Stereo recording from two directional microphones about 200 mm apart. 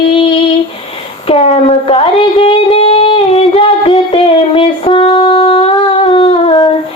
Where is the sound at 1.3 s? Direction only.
30° left (ahead or behind).